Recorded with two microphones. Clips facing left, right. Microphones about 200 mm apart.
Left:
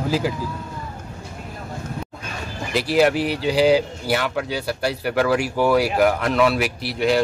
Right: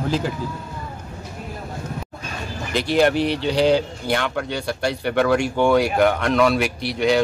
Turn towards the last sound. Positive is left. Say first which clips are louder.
# right 1 dB
turn(degrees=5)  # may be behind; listen again after turning